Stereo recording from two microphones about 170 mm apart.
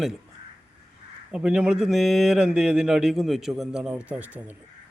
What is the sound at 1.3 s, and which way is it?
Speech, 5° right (ahead or behind).